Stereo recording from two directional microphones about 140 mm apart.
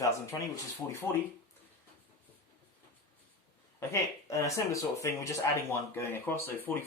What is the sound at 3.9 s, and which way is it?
Speech, 20° left (ahead or behind).